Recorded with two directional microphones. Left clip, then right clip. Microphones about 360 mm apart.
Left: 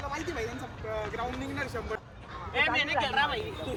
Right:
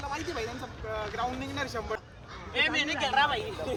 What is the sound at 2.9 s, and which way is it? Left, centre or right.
Speech, centre.